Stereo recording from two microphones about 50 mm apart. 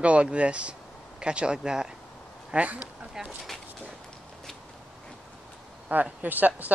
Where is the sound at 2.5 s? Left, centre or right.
Right.